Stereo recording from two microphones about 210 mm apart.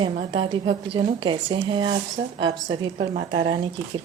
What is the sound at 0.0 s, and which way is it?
A woman's voice, 25° right (ahead or behind).